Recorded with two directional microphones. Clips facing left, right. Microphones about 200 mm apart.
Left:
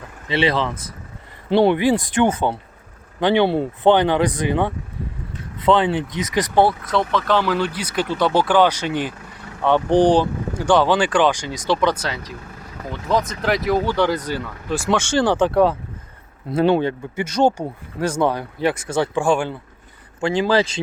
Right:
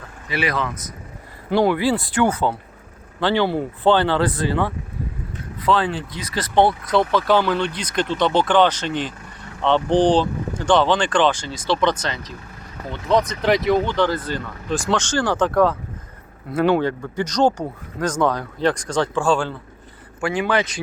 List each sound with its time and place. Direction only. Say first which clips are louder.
0.3 s speech: left 4 dB; 25° left (ahead or behind)
16.6 s speech: left 1 dB; 25° left (ahead or behind)
17.3 s speech: left 1 dB; 10° left (ahead or behind)
20.2 s speech: left 3 dB; 25° left (ahead or behind)